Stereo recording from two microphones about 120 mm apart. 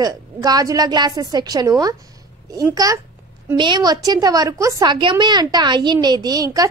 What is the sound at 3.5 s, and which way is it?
A woman's voice, 40° right (ahead or behind).